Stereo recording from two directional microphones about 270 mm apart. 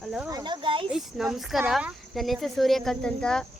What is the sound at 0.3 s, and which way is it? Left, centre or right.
Speech, centre.